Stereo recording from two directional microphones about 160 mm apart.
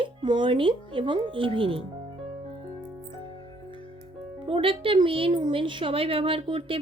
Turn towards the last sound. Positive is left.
turn(degrees=-35)  # may be behind; listen again after turning